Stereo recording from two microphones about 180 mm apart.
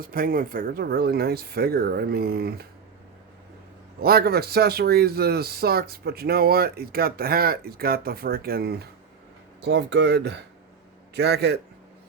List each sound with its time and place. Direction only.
0.0 s speech: 50° right (ahead or behind)
4.0 s speech: 60° right (ahead or behind)
9.6 s speech: 75° right (ahead or behind)